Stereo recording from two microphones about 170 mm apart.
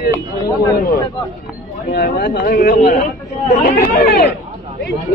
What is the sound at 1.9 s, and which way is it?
Speech, 75° left (ahead or behind).